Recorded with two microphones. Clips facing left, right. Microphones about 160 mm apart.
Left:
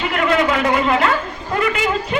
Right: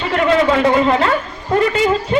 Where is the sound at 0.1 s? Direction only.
30° right (ahead or behind).